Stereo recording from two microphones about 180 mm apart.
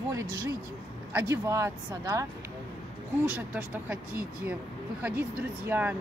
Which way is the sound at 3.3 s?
10° right (ahead or behind).